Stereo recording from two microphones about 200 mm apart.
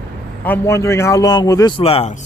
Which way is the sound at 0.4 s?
10° left (ahead or behind).